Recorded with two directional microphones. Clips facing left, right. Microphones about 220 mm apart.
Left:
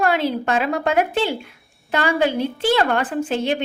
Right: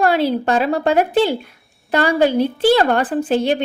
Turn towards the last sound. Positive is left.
turn(degrees=-35)  # may be behind; listen again after turning